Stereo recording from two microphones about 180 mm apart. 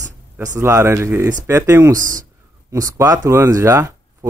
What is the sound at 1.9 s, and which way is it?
Speech, 50° right (ahead or behind).